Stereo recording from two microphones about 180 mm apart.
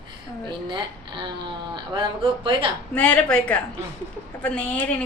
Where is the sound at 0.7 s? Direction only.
25° right (ahead or behind).